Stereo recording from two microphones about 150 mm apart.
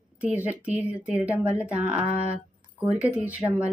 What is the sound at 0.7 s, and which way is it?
Speech, 10° right (ahead or behind).